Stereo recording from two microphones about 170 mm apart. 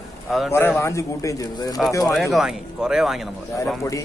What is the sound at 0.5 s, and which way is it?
Speech, 15° left (ahead or behind).